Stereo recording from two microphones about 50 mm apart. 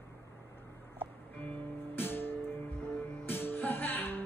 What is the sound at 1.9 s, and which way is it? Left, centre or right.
Music, left.